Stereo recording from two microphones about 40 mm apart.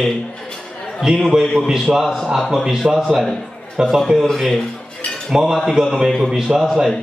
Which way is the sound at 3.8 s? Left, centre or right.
Right.